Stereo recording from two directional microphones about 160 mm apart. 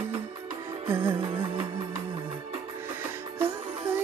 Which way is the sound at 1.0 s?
35° right (ahead or behind).